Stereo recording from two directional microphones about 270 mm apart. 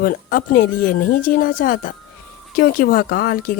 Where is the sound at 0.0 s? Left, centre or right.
Left.